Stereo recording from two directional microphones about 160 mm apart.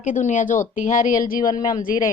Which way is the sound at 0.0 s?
50° left (ahead or behind).